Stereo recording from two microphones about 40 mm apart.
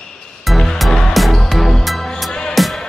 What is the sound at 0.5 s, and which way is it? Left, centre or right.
Music, centre.